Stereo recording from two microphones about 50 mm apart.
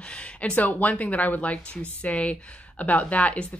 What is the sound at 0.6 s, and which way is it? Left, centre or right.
Speech, left.